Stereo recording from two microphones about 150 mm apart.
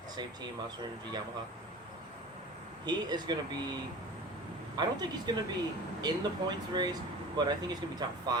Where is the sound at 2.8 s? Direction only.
30° right (ahead or behind).